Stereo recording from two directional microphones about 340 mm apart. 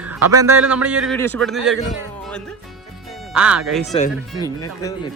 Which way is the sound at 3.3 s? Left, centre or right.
Centre.